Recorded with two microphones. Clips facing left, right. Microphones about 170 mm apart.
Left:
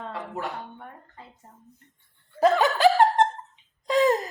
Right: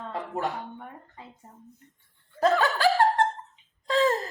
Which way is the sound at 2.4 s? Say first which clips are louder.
Left 3 dB; 20° left (ahead or behind).